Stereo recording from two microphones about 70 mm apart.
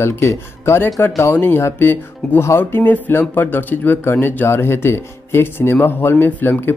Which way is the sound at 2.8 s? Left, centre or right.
Left.